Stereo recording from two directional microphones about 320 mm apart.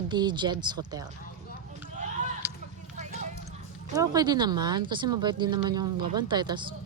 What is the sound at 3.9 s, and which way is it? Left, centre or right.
Speech, centre.